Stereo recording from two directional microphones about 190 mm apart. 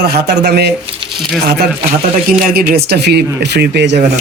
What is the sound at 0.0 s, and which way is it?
Speech, 55° right (ahead or behind).